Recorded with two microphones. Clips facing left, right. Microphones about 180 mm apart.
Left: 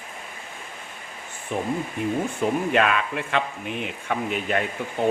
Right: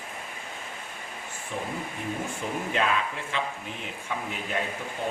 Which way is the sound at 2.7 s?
70° left (ahead or behind).